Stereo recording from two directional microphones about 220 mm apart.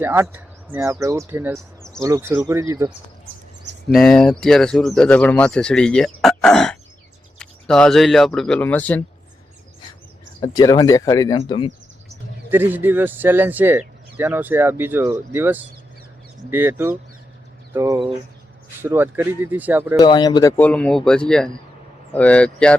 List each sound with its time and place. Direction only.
0.0 s speech: 10° right (ahead or behind)
3.8 s speech: 5° left (ahead or behind)
10.4 s speech: 15° left (ahead or behind)
12.5 s speech: 10° right (ahead or behind)
20.0 s speech: 20° left (ahead or behind)